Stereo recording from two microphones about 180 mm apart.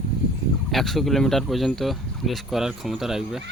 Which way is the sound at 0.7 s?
Centre (ahead or behind).